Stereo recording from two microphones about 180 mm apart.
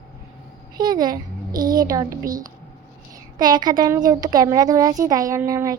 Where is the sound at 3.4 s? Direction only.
25° right (ahead or behind).